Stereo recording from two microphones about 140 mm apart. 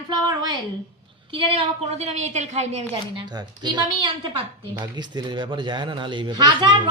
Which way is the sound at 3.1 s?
30° right (ahead or behind).